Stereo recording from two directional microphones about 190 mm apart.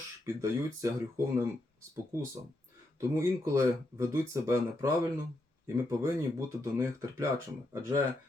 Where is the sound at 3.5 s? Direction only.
15° right (ahead or behind).